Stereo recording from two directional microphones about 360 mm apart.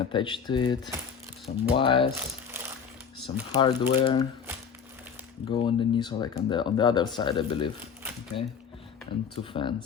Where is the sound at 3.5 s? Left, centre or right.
Centre.